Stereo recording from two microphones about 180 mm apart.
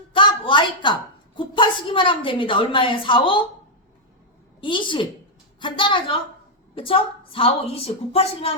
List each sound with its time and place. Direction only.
0.1 s a sound: 25° left (ahead or behind)
1.4 s a woman's voice: 25° left (ahead or behind)
4.6 s a woman's voice: 25° left (ahead or behind)